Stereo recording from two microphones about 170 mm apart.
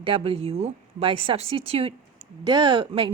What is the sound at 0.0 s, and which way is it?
A woman's voice, 30° right (ahead or behind).